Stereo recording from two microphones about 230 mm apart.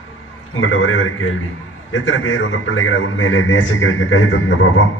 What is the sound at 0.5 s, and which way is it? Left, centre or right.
A man's voice, left.